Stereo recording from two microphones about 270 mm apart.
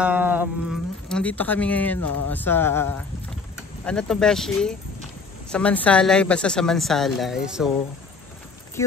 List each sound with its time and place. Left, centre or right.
0.0 s a sound: centre
3.8 s a woman's voice: centre
8.8 s speech: centre